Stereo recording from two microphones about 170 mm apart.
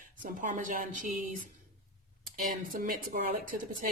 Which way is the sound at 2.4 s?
55° right (ahead or behind).